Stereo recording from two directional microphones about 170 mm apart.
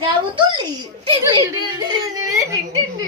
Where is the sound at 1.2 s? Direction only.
25° right (ahead or behind).